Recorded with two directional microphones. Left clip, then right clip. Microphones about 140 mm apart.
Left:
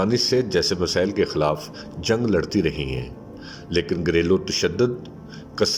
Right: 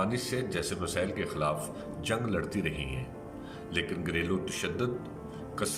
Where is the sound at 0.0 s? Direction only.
50° left (ahead or behind).